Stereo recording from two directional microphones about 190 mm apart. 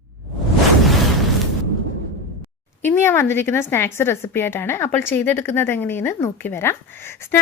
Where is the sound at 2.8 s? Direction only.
10° left (ahead or behind).